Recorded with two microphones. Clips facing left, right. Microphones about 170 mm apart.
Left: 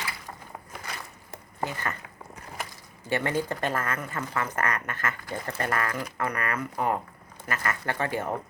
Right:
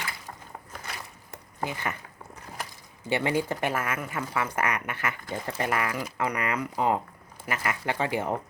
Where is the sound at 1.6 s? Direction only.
10° right (ahead or behind).